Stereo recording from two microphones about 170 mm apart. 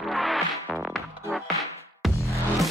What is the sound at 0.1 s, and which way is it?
Music, centre (ahead or behind).